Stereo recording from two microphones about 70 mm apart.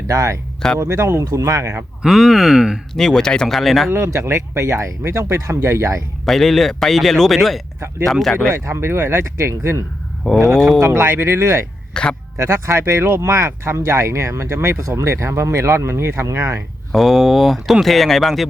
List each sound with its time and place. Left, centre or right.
0.1 s speech: right
2.0 s speech: centre
2.9 s speech: centre
3.8 s speech: right
6.2 s speech: centre
8.4 s speech: right
10.2 s speech: centre
10.8 s speech: right
11.9 s speech: centre
12.4 s speech: right
16.9 s speech: centre